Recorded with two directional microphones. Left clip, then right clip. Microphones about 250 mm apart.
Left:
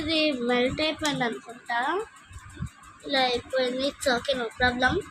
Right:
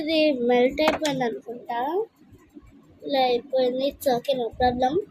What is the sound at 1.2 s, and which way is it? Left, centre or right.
Speech, left.